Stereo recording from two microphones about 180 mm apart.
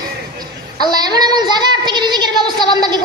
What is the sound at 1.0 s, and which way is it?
A woman's voice, 20° right (ahead or behind).